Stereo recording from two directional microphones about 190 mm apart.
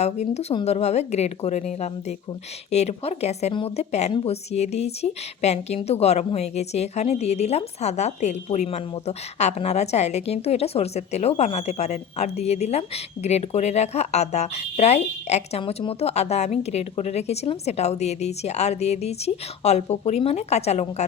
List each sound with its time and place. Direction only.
0.0 s speech: 35° left (ahead or behind)